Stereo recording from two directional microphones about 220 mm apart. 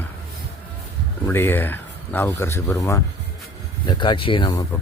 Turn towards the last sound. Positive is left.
turn(degrees=20)  # may be behind; listen again after turning